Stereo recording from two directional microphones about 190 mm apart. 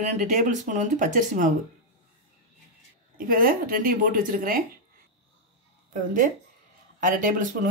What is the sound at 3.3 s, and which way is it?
Speech, 50° right (ahead or behind).